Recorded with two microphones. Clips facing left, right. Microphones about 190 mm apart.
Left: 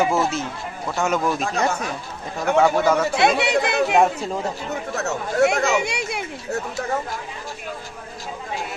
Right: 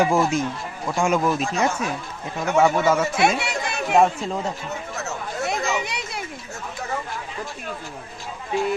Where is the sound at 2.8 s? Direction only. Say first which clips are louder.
Left 1 dB; 5° right (ahead or behind).